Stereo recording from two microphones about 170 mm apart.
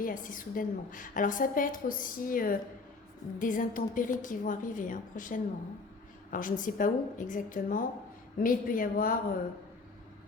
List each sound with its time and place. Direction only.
0.0 s a woman's voice: 50° left (ahead or behind)